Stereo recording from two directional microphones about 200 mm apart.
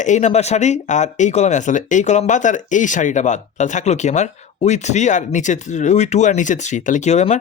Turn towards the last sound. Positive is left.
turn(degrees=35)  # may be behind; listen again after turning